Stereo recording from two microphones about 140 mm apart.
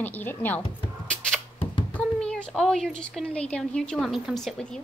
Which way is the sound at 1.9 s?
10° left (ahead or behind).